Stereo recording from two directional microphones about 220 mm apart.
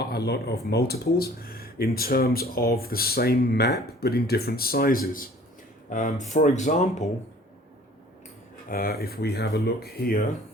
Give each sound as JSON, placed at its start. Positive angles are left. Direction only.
{"t": 0.0, "sound": "speech", "side_deg": 45}
{"t": 8.7, "sound": "speech", "side_deg": 40}